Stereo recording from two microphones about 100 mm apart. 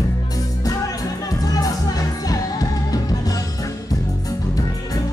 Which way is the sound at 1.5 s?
40° left (ahead or behind).